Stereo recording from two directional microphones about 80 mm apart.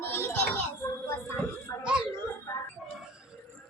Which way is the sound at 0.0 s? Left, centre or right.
Left.